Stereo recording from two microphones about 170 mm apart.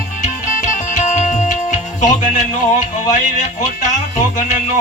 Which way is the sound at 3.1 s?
45° left (ahead or behind).